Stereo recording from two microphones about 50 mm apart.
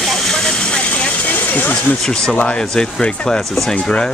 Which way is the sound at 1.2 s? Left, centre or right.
Left.